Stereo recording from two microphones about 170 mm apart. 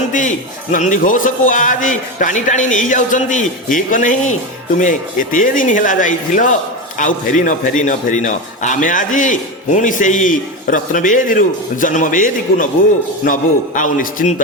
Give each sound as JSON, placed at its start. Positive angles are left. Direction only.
{"t": 0.1, "sound": "a man's voice", "side_deg": 50}